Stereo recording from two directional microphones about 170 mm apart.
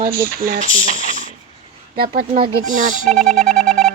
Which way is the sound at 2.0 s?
60° right (ahead or behind).